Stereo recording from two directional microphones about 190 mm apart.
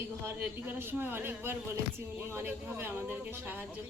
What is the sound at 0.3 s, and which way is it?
A woman's voice, 10° right (ahead or behind).